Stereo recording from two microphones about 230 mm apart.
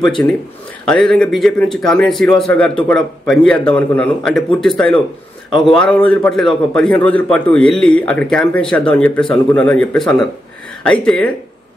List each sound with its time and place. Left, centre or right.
0.2 s a man's voice: centre